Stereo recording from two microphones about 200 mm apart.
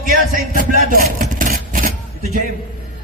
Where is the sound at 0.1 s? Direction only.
45° right (ahead or behind).